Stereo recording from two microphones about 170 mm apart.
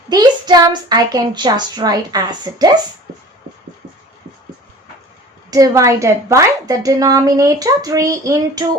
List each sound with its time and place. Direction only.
0.1 s a woman's voice: 25° right (ahead or behind)
5.5 s a woman's voice: 20° right (ahead or behind)